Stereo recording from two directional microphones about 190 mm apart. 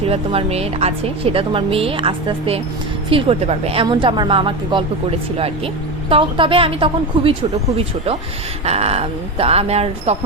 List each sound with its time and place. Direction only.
0.0 s a woman's voice: 30° right (ahead or behind)
6.1 s a woman's voice: 25° right (ahead or behind)